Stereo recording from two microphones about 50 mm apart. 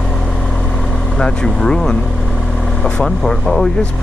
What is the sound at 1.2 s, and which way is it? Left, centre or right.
Speech, centre.